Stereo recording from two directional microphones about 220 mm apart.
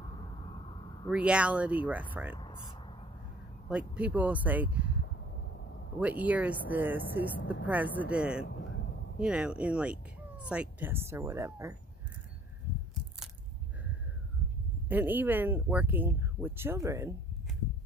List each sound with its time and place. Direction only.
1.0 s speech: 5° right (ahead or behind)
2.3 s speech: 20° left (ahead or behind)
3.6 s speech: 5° right (ahead or behind)
5.9 s speech: 5° right (ahead or behind)
14.9 s speech: 10° right (ahead or behind)